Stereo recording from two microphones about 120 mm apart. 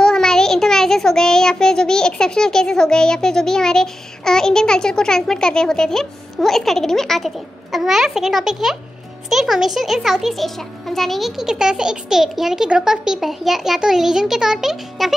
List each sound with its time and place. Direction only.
0.0 s child singing: 5° left (ahead or behind)